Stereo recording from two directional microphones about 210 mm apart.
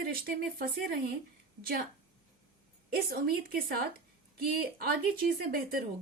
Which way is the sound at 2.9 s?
45° right (ahead or behind).